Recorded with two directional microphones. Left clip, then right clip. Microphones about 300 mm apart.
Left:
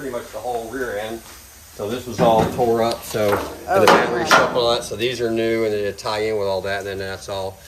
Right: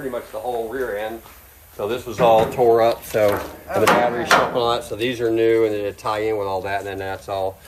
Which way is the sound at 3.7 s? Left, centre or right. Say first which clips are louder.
Left 5 dB; centre.